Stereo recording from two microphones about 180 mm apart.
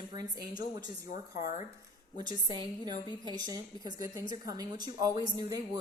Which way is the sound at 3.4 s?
20° right (ahead or behind).